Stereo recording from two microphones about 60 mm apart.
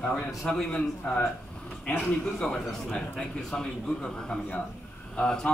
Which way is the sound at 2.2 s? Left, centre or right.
Centre.